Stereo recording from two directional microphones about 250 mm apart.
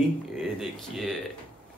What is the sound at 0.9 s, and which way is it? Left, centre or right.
Speech, centre.